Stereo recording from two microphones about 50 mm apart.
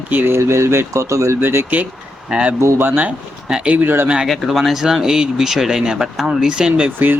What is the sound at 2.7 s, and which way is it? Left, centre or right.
Speech, right.